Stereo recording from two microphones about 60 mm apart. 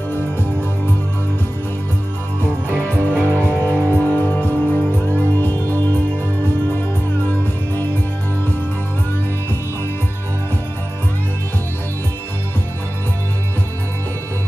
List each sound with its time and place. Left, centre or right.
0.1 s music: left
3.1 s music: left